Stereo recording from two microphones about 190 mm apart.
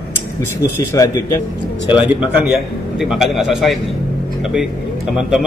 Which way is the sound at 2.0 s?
5° right (ahead or behind).